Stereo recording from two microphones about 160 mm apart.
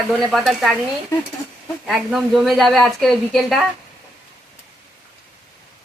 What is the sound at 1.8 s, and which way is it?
Speech, centre (ahead or behind).